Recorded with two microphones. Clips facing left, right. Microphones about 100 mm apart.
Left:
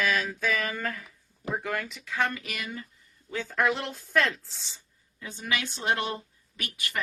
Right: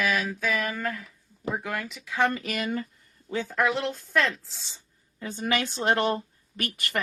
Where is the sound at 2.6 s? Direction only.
50° right (ahead or behind).